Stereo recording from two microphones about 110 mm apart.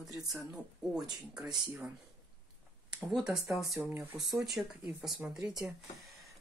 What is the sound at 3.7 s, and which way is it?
Speech, 20° right (ahead or behind).